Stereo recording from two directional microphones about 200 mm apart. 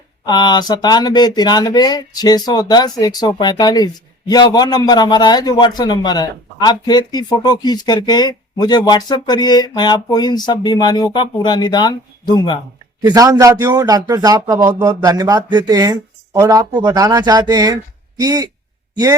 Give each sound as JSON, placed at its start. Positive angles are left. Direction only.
{"t": 0.3, "sound": "a man's voice", "side_deg": 20}
{"t": 13.0, "sound": "a man's voice", "side_deg": -20}